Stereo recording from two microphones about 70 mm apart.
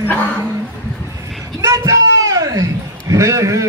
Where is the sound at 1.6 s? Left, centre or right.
Right.